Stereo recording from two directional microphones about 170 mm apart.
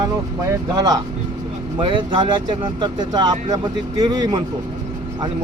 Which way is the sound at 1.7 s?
25° right (ahead or behind).